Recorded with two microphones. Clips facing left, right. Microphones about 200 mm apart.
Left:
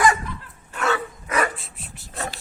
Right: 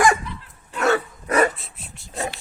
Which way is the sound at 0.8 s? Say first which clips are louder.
Right 4 dB; 40° right (ahead or behind).